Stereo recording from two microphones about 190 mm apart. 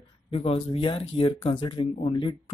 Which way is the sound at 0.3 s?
30° left (ahead or behind).